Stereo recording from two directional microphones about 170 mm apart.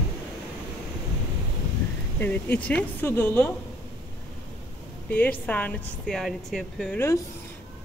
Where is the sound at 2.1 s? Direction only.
10° left (ahead or behind).